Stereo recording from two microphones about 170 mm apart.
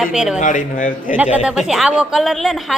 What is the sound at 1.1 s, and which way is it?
Speech, 10° right (ahead or behind).